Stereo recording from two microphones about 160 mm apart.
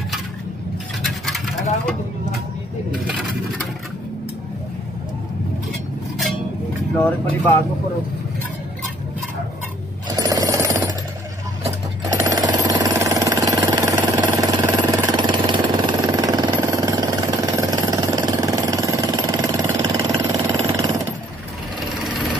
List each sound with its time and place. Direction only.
1.0 s coin: centre (ahead or behind)
2.9 s scrape: 5° right (ahead or behind)
7.0 s speech: 10° left (ahead or behind)
10.0 s a sound: 20° right (ahead or behind)
12.0 s jackhammer: 20° right (ahead or behind)
21.7 s a sound: centre (ahead or behind)